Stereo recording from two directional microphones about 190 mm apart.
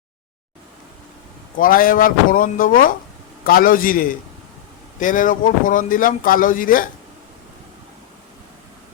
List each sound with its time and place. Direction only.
1.5 s speech: 45° left (ahead or behind)